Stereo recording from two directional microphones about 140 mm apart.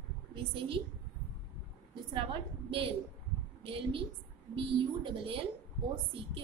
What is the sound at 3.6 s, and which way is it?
A woman's voice, 40° right (ahead or behind).